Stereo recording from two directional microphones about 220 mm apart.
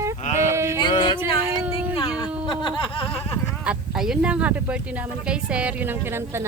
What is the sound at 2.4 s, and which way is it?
Snicker, 20° left (ahead or behind).